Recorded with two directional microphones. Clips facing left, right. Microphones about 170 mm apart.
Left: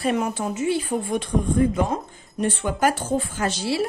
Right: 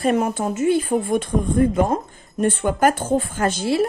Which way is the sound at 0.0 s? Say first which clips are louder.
Right 4 dB; 50° right (ahead or behind).